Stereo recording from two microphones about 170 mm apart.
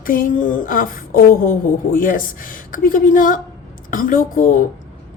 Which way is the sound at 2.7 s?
55° left (ahead or behind).